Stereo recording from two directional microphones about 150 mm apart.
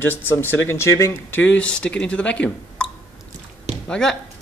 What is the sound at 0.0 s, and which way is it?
Speech, 15° left (ahead or behind).